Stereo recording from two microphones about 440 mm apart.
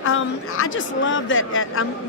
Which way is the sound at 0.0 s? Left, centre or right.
Left.